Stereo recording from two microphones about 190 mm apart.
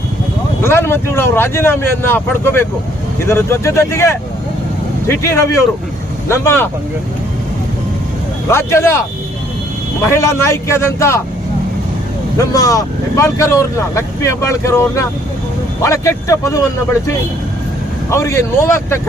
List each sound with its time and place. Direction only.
0.6 s speech: 15° left (ahead or behind)
8.4 s speech: 15° left (ahead or behind)
10.1 s speech: 15° left (ahead or behind)
12.4 s speech: 15° left (ahead or behind)
18.1 s speech: 15° left (ahead or behind)